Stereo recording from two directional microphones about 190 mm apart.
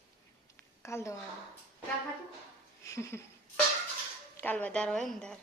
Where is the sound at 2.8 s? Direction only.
15° left (ahead or behind).